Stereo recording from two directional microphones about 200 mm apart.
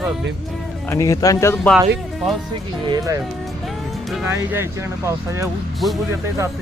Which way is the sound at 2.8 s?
20° right (ahead or behind).